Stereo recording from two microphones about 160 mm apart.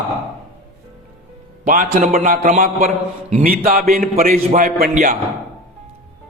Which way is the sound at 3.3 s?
65° right (ahead or behind).